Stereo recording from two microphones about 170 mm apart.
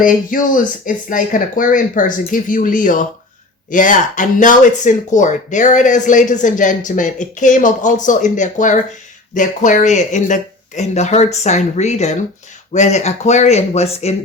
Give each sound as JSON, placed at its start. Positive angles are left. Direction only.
{"t": 0.0, "sound": "speech", "side_deg": 55}